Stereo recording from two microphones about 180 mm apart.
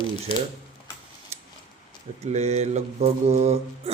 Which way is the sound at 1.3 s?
35° right (ahead or behind).